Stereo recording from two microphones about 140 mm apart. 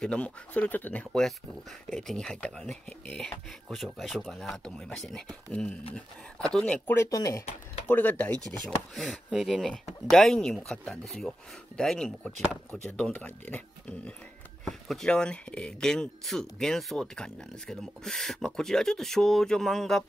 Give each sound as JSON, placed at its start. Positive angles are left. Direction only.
{"t": 0.0, "sound": "speech", "side_deg": 10}
{"t": 7.1, "sound": "speech", "side_deg": 25}
{"t": 7.9, "sound": "speech", "side_deg": 10}